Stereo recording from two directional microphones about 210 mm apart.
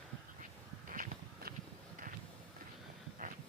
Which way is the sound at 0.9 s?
40° right (ahead or behind).